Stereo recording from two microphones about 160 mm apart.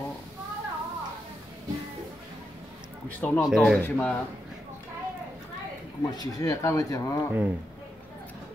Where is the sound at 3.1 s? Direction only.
10° left (ahead or behind).